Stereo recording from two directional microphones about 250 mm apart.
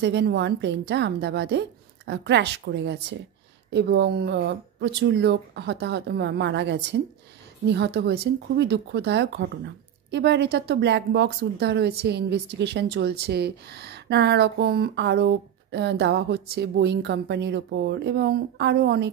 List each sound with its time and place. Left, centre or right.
0.0 s a woman's voice: right